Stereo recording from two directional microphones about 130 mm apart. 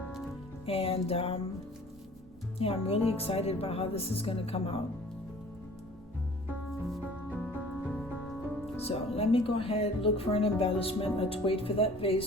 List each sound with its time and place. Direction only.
0.6 s speech: 50° left (ahead or behind)
2.6 s speech: 50° left (ahead or behind)
7.3 s music: 10° left (ahead or behind)
8.8 s speech: 50° left (ahead or behind)